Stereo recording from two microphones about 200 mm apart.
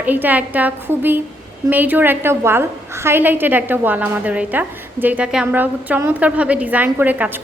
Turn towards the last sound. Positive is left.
turn(degrees=-10)  # may be behind; listen again after turning